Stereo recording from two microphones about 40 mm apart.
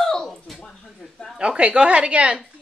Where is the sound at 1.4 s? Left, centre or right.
Right.